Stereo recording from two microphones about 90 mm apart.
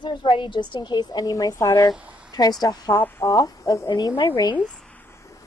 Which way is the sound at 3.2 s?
45° left (ahead or behind).